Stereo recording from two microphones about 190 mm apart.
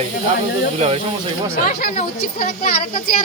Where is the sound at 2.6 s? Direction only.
45° left (ahead or behind).